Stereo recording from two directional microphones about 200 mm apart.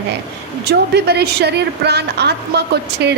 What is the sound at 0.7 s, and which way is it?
A woman's voice, 55° right (ahead or behind).